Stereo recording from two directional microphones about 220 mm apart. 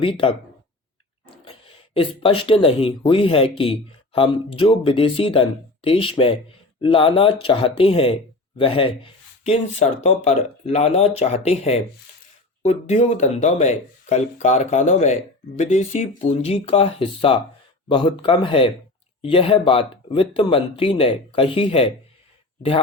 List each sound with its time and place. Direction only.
0.0 s speech: 25° left (ahead or behind)
1.5 s speech: 25° left (ahead or behind)